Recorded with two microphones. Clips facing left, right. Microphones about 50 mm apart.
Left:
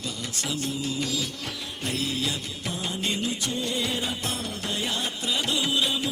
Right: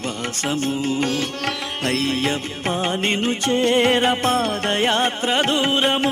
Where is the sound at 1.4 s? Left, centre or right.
Right.